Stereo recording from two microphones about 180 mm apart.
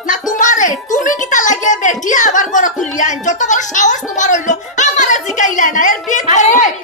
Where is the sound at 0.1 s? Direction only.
45° left (ahead or behind).